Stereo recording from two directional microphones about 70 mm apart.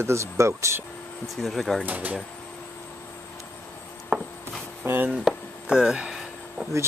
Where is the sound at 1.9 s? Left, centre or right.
Right.